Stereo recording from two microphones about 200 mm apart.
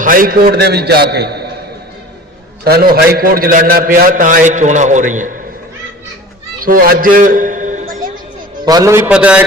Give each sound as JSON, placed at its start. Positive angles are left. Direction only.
{"t": 0.0, "sound": "a man's voice", "side_deg": -45}
{"t": 2.6, "sound": "a man's voice", "side_deg": -50}
{"t": 6.6, "sound": "a man's voice", "side_deg": -45}
{"t": 8.6, "sound": "a man's voice", "side_deg": -15}